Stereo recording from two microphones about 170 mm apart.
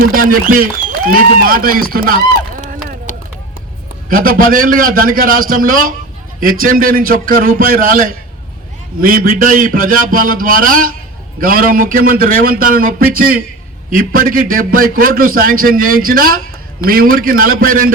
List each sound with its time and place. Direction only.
0.1 s a man's voice: 55° right (ahead or behind)
3.1 s run: 45° left (ahead or behind)
4.1 s a man's voice: 55° right (ahead or behind)